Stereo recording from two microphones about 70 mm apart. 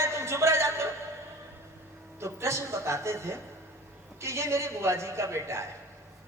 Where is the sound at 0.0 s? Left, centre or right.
Right.